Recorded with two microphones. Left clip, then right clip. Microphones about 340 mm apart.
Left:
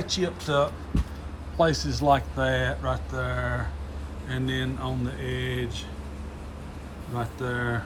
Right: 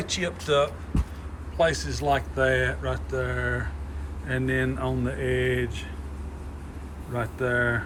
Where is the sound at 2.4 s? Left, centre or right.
Left.